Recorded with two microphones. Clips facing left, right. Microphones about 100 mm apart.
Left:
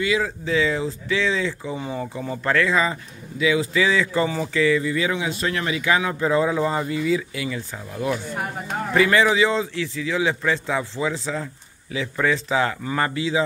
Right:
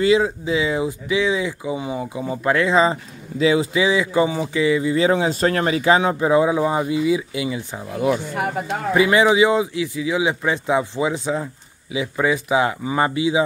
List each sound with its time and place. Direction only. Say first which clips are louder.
0.0 s speech: right 6 dB; 25° right (ahead or behind)
3.7 s speech: right 2 dB; 15° right (ahead or behind)
8.9 s speech: right 2 dB; 15° right (ahead or behind)